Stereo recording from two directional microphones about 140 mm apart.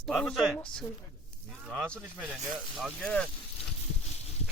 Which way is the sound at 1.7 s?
5° left (ahead or behind).